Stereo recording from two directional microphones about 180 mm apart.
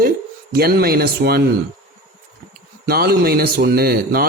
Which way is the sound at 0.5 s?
60° right (ahead or behind).